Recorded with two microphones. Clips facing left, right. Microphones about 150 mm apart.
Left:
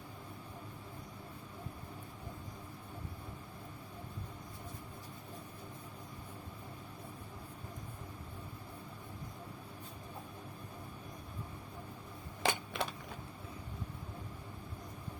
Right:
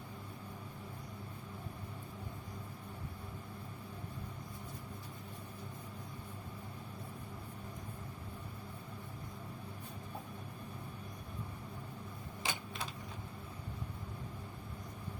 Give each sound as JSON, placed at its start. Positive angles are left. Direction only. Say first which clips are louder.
{"t": 12.4, "sound": "typewriter", "louder": "left 7 dB", "side_deg": 65}